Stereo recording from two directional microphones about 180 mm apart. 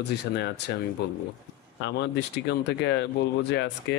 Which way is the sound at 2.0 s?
70° left (ahead or behind).